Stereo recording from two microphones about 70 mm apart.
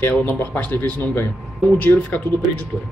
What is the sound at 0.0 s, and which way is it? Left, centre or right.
Speech, left.